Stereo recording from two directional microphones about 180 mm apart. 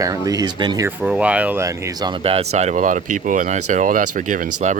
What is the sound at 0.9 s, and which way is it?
Speech, 5° right (ahead or behind).